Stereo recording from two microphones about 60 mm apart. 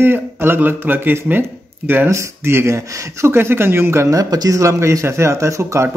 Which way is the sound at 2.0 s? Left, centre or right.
Right.